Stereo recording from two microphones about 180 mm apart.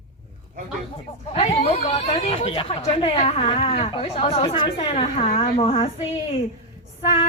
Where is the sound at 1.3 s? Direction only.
40° left (ahead or behind).